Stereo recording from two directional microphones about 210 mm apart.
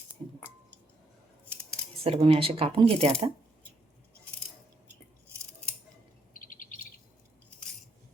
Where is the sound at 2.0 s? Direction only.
25° right (ahead or behind).